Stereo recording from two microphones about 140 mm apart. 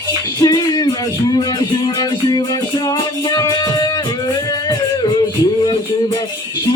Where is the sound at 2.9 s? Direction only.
25° left (ahead or behind).